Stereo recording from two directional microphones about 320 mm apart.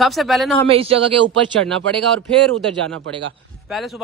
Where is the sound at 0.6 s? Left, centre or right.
Centre.